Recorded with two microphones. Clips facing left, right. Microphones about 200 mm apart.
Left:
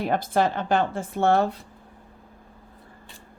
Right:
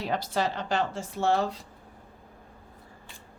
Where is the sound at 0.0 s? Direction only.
50° left (ahead or behind).